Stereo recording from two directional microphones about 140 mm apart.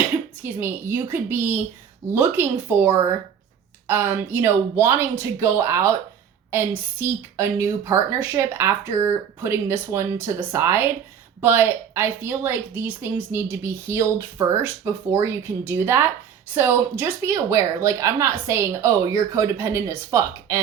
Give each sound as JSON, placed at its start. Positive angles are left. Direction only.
{"t": 0.4, "sound": "a woman's voice", "side_deg": -15}